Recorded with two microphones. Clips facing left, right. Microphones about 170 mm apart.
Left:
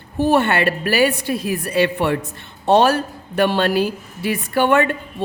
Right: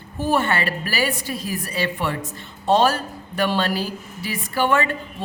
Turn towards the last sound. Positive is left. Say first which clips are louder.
# left 4 dB
turn(degrees=60)  # may be behind; listen again after turning